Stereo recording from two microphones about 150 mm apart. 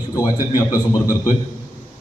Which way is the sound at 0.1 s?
25° left (ahead or behind).